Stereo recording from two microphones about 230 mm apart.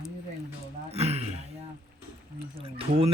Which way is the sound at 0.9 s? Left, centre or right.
Right.